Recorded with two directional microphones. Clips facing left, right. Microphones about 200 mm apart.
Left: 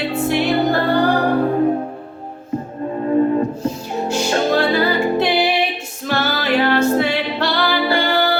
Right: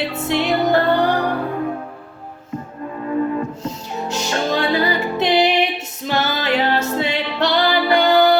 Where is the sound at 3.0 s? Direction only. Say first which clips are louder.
Left 5 dB; 35° left (ahead or behind).